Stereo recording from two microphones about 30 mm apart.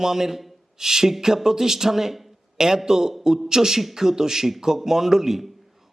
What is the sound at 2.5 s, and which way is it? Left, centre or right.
A man's voice, centre.